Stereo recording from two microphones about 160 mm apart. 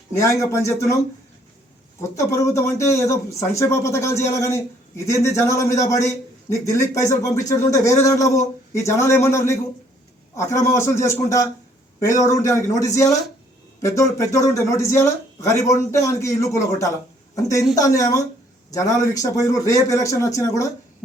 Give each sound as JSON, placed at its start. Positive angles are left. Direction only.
{"t": 0.2, "sound": "speech", "side_deg": 20}
{"t": 2.0, "sound": "speech", "side_deg": 20}